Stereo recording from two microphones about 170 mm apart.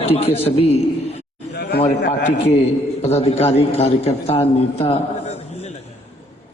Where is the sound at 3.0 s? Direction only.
40° left (ahead or behind).